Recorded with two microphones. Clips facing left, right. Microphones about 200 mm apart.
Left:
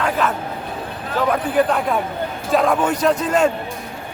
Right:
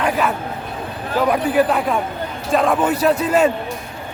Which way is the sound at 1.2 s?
10° right (ahead or behind).